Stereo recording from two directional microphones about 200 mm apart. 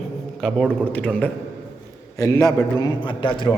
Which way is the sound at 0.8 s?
5° left (ahead or behind).